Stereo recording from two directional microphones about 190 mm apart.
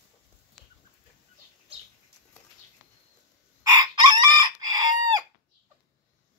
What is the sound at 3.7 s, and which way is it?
Chicken, 20° right (ahead or behind).